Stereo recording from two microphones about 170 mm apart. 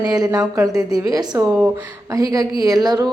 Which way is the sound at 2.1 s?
20° right (ahead or behind).